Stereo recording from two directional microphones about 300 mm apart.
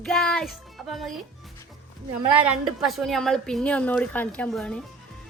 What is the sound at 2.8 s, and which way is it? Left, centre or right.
A woman's voice, centre.